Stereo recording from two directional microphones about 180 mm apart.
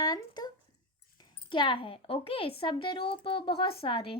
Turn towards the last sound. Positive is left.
turn(degrees=30)  # may be behind; listen again after turning